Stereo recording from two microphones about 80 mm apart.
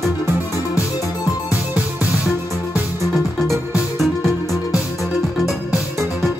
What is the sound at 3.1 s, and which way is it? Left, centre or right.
Music, centre.